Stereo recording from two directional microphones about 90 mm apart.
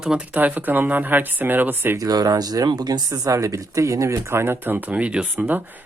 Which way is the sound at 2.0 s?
45° right (ahead or behind).